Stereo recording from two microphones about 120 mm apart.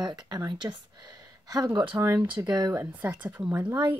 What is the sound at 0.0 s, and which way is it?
Speech, 35° right (ahead or behind).